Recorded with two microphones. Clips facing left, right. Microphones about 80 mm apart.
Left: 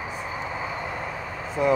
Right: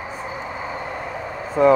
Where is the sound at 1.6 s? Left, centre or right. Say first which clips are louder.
Right 8 dB; right.